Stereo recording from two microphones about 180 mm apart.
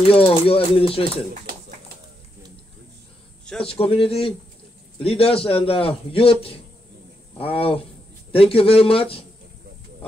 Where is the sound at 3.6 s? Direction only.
30° left (ahead or behind).